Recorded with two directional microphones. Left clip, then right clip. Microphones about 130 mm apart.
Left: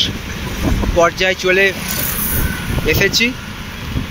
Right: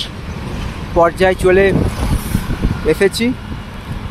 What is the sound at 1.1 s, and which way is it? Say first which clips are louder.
Speech: right 2 dB; 50° right (ahead or behind).